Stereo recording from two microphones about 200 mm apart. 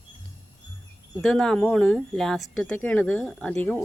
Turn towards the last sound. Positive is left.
turn(degrees=10)  # may be behind; listen again after turning